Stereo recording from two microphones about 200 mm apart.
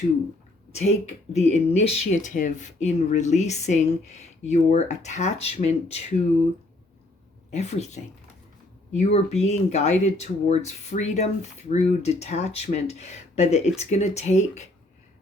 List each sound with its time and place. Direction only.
0.7 s speech: 35° left (ahead or behind)
7.5 s speech: 35° left (ahead or behind)